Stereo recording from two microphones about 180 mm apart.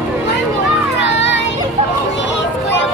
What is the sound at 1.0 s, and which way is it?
Child singing, 80° left.